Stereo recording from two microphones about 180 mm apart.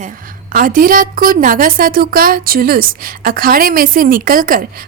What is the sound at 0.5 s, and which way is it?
A woman's voice, 50° right (ahead or behind).